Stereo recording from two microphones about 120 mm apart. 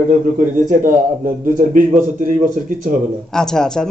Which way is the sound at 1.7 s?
90° right.